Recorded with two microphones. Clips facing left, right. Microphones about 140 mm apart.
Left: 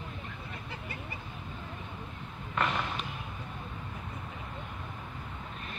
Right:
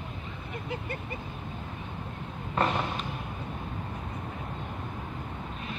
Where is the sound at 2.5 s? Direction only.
30° right (ahead or behind).